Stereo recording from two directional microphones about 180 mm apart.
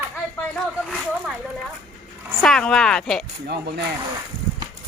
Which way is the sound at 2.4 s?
5° left (ahead or behind).